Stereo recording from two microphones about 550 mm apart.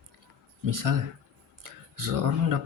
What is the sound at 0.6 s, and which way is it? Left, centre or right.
Speech, right.